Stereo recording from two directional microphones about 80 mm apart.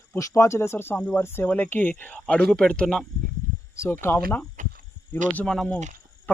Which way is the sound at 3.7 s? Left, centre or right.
Left.